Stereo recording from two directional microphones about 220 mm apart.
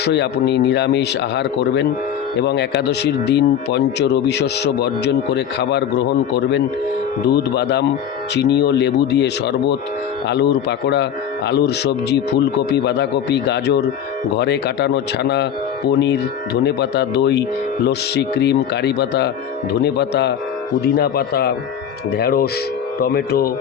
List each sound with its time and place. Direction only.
0.0 s speech: 50° left (ahead or behind)